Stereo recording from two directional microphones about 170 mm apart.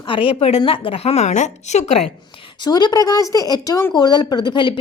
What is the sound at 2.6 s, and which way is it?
A woman's voice, 25° left (ahead or behind).